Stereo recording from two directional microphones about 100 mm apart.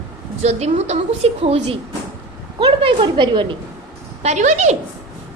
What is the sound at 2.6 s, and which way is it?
A woman's voice, 55° right (ahead or behind).